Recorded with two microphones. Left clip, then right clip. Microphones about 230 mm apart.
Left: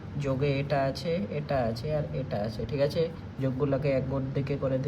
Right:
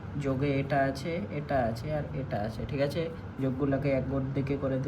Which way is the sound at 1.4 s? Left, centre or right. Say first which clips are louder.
Right 1 dB; left.